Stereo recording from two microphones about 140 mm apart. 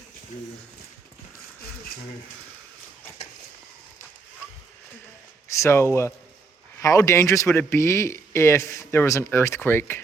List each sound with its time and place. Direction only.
5.5 s a man's voice: 20° left (ahead or behind)